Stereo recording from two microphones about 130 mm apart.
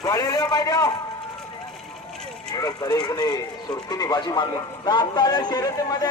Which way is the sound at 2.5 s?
30° left (ahead or behind).